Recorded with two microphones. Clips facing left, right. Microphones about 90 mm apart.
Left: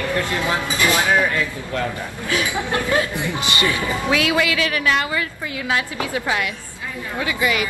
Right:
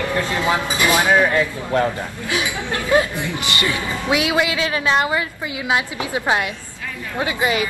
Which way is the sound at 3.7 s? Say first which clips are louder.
Even; 20° right (ahead or behind).